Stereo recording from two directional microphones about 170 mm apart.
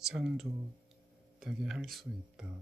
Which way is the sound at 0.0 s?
Centre (ahead or behind).